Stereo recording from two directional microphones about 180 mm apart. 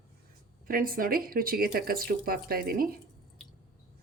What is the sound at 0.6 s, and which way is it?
Speech, 50° right (ahead or behind).